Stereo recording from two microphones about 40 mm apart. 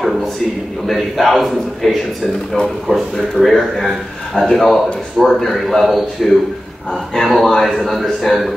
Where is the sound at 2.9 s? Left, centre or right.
Left.